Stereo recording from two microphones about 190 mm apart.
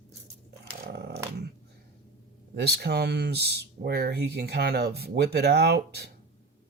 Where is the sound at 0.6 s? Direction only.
60° right (ahead or behind).